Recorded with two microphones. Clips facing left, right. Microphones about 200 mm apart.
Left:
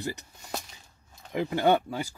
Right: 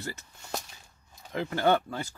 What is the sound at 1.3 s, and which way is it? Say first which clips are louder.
Speech: left 2 dB; 15° left (ahead or behind).